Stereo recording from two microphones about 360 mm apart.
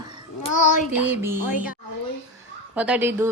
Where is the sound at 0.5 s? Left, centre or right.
Left.